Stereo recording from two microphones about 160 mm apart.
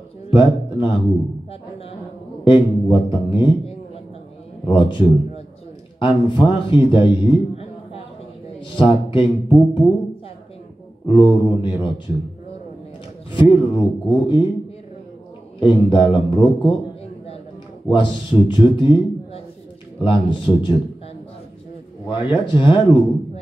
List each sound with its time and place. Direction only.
0.3 s a man's voice: 30° left (ahead or behind)
2.4 s a man's voice: 30° left (ahead or behind)
11.1 s a man's voice: 30° left (ahead or behind)
13.3 s a man's voice: 30° left (ahead or behind)
15.6 s a man's voice: 30° left (ahead or behind)
17.8 s a man's voice: 30° left (ahead or behind)
22.0 s a man's voice: 30° left (ahead or behind)